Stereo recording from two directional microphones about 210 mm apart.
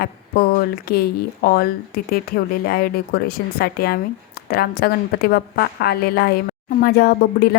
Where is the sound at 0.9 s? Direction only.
45° left (ahead or behind).